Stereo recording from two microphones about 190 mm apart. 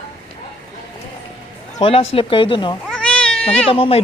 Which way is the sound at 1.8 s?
30° left (ahead or behind).